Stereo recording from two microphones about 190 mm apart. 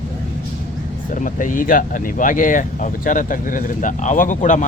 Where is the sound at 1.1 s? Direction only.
45° left (ahead or behind).